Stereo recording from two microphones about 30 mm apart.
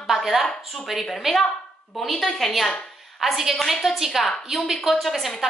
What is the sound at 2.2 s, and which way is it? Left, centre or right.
Speech, centre.